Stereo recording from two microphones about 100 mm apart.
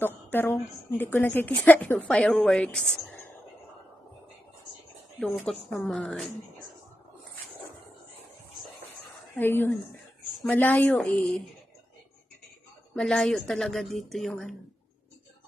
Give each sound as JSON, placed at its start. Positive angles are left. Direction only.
{"t": 0.3, "sound": "a woman's voice", "side_deg": 20}
{"t": 5.5, "sound": "a woman's voice", "side_deg": 5}
{"t": 9.3, "sound": "a woman's voice", "side_deg": 20}
{"t": 12.9, "sound": "a woman's voice", "side_deg": 5}